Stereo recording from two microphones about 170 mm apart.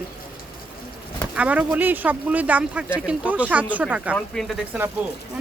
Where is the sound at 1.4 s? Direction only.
10° right (ahead or behind).